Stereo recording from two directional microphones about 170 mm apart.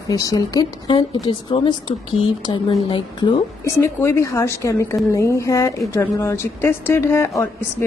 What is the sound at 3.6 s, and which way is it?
A woman's voice, 15° left (ahead or behind).